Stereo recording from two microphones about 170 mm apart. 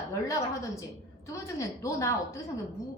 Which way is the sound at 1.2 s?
15° left (ahead or behind).